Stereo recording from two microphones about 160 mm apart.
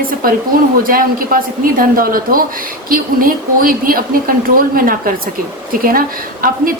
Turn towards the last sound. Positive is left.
turn(degrees=-60)  # may be behind; listen again after turning